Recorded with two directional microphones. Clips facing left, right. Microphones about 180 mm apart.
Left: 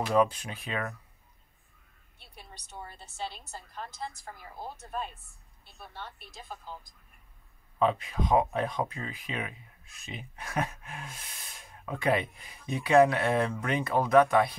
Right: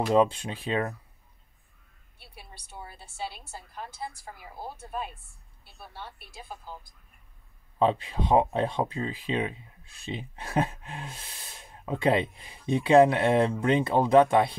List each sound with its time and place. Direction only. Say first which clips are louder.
0.1 s speech: right 3 dB; 25° right (ahead or behind)
2.1 s a woman's voice: right 1 dB; 5° right (ahead or behind)
7.8 s speech: right 2 dB; 30° right (ahead or behind)